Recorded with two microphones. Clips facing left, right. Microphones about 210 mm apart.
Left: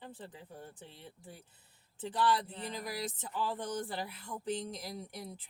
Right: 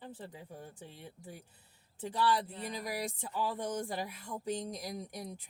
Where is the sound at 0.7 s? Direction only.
10° right (ahead or behind).